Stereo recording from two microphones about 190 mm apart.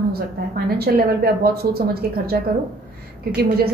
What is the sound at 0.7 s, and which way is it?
A woman's voice, 55° right (ahead or behind).